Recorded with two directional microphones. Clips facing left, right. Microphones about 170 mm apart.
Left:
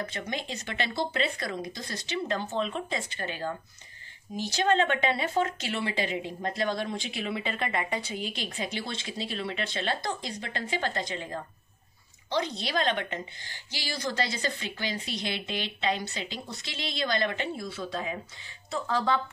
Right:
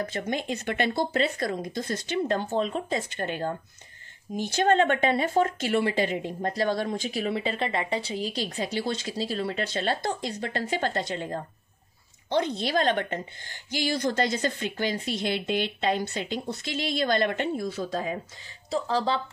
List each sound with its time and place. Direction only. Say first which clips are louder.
0.0 s speech: right 5 dB; 45° right (ahead or behind)
12.3 s speech: right 4 dB; 55° right (ahead or behind); by 19.2 s 35° right (ahead or behind)